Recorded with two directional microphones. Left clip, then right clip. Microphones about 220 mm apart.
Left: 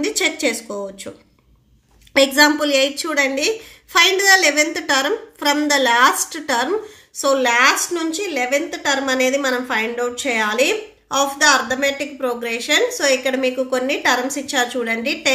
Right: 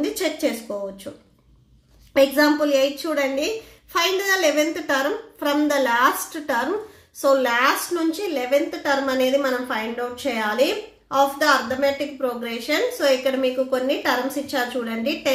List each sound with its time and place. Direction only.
0.0 s a woman's voice: 30° left (ahead or behind)
2.1 s a woman's voice: 35° left (ahead or behind)
4.3 s a woman's voice: 35° left (ahead or behind)